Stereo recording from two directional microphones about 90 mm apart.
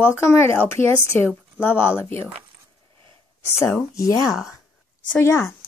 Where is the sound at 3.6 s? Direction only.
35° left (ahead or behind).